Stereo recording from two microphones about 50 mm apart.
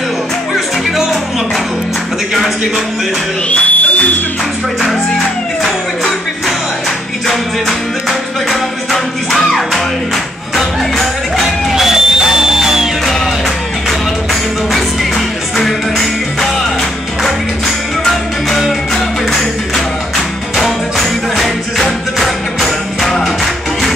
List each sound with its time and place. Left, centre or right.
3.4 s music: left
7.2 s music: centre
11.7 s music: centre
15.5 s music: centre
18.6 s music: centre
20.5 s music: centre